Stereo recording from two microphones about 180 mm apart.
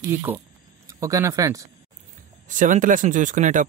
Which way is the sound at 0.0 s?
15° right (ahead or behind).